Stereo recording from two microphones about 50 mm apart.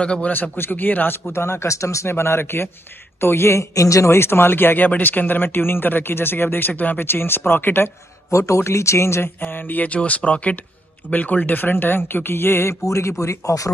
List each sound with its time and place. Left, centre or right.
0.0 s speech: left
0.3 s speech: left
1.3 s speech: left
2.1 s a man's voice: left
6.7 s a man's voice: left
8.3 s speech: left
9.4 s a man's voice: left